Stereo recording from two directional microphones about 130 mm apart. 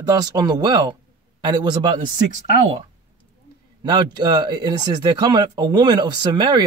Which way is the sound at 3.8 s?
35° right (ahead or behind).